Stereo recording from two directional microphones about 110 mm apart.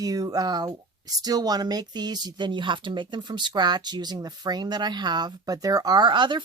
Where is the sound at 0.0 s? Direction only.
35° right (ahead or behind).